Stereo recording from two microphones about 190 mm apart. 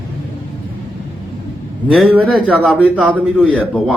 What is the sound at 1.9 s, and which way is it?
Speech, 5° right (ahead or behind).